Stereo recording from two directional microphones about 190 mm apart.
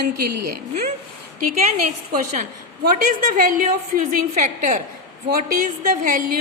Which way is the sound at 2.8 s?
50° right (ahead or behind).